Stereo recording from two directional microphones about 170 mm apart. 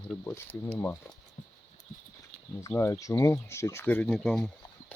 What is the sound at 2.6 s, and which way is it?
Speech, 15° left (ahead or behind).